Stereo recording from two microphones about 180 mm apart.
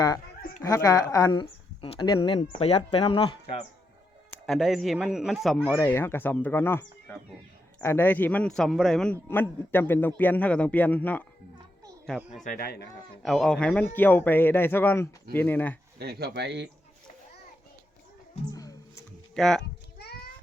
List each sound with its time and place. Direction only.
0.6 s speech: 20° left (ahead or behind)
4.4 s a man's voice: centre (ahead or behind)
5.7 s a man's voice: 10° left (ahead or behind)
12.0 s a man's voice: 5° right (ahead or behind)
12.4 s speech: 50° left (ahead or behind)
13.2 s a man's voice: centre (ahead or behind)
16.0 s speech: 60° right (ahead or behind)
18.5 s music: 20° left (ahead or behind)
19.3 s speech: 5° left (ahead or behind)
20.0 s a sound: 60° left (ahead or behind)